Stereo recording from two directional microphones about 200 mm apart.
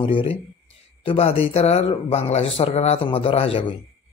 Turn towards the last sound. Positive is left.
turn(degrees=30)  # may be behind; listen again after turning